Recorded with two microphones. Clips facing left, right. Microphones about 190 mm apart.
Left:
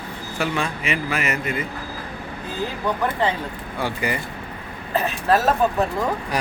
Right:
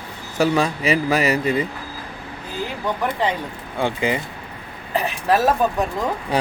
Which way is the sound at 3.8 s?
20° right (ahead or behind).